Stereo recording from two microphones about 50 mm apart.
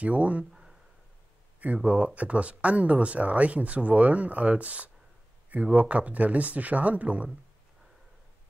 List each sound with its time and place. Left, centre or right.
0.0 s speech: right
0.5 s a sound: centre
1.6 s speech: right